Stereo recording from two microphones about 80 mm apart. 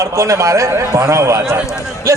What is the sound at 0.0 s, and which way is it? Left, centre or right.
A man's voice, right.